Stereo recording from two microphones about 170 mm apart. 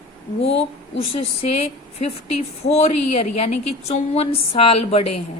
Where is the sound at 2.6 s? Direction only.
40° left (ahead or behind).